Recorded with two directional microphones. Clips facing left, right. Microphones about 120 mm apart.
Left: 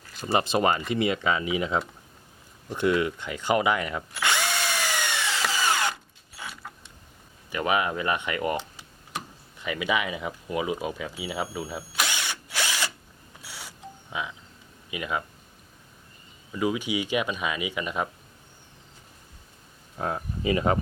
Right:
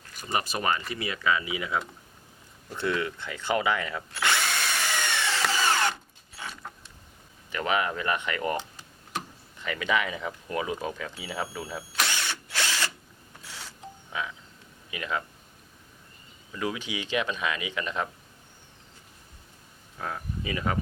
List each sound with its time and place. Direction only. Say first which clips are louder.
0.2 s speech: left 6 dB; 25° left (ahead or behind)
2.6 s drill: left 5 dB; 15° left (ahead or behind)
6.3 s mechanisms: even; 10° left (ahead or behind)
7.5 s speech: left 2 dB; 15° left (ahead or behind)
9.1 s a sound: right 1 dB; 15° left (ahead or behind)
14.8 s speech: left 2 dB; 10° left (ahead or behind)
16.5 s speech: left 5 dB; 15° left (ahead or behind)
20.0 s speech: left 4 dB; 30° left (ahead or behind)